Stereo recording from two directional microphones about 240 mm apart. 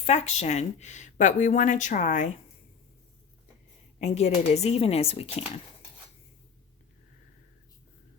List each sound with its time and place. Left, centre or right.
0.0 s speech: left
3.9 s a woman's voice: left